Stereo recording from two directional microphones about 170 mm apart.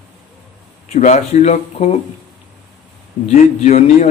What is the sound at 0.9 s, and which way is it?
Speech, 45° left (ahead or behind).